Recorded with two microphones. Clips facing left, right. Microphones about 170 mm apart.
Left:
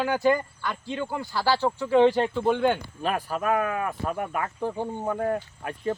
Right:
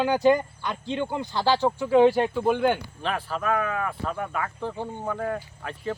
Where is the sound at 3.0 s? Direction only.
10° left (ahead or behind).